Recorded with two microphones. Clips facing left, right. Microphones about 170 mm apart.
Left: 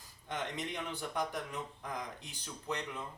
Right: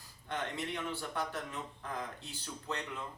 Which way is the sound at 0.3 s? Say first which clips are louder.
Right 1 dB; 20° left (ahead or behind).